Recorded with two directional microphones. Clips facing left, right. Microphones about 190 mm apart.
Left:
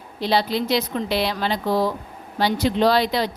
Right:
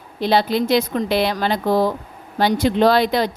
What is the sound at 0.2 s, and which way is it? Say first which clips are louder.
A woman's voice: right 4 dB; 50° right (ahead or behind).